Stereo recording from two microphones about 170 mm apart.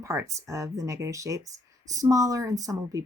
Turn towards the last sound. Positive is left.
turn(degrees=-20)  # may be behind; listen again after turning